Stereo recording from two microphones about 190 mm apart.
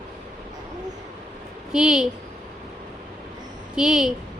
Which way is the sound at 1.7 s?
5° right (ahead or behind).